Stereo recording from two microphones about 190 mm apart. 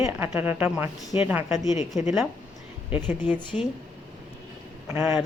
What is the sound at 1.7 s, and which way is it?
Speech, 40° left (ahead or behind).